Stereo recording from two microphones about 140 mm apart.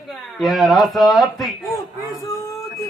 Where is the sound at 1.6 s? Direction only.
25° left (ahead or behind).